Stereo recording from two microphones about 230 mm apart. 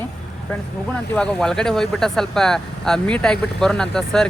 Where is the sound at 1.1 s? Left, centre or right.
Centre.